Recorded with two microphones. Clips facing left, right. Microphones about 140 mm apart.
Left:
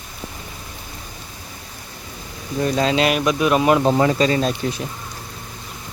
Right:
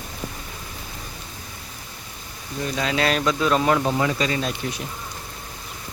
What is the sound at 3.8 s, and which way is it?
Speech, 35° left (ahead or behind).